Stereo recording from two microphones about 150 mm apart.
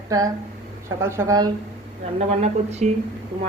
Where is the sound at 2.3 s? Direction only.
45° right (ahead or behind).